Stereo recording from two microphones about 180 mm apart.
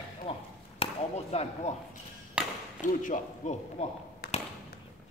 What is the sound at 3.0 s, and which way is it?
Speech, 45° left (ahead or behind).